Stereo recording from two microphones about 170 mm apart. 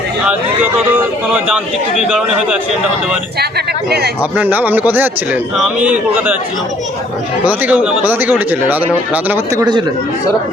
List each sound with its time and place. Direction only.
0.3 s speech: 10° right (ahead or behind)
3.8 s speech: 70° right (ahead or behind)
4.2 s speech: 10° right (ahead or behind)
7.4 s speech: 10° right (ahead or behind)